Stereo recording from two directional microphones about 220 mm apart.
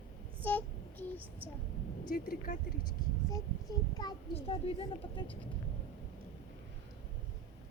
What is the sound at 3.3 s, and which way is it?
A child's voice, 15° left (ahead or behind).